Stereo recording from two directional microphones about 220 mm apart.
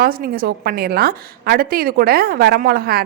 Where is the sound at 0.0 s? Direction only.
40° right (ahead or behind).